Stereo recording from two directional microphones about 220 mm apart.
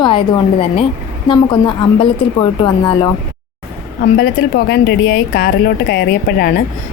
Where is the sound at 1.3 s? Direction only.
20° left (ahead or behind).